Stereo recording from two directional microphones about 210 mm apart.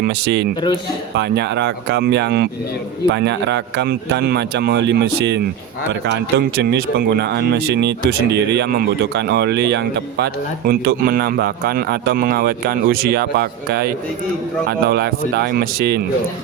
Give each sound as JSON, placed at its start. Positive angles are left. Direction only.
{"t": 0.0, "sound": "speech", "side_deg": -50}